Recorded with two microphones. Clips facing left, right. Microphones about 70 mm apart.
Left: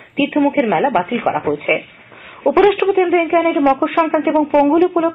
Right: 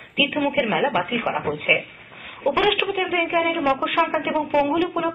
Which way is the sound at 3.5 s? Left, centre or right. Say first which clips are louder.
Left 7 dB; left.